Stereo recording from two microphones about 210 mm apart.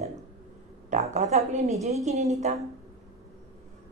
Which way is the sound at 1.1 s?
35° right (ahead or behind).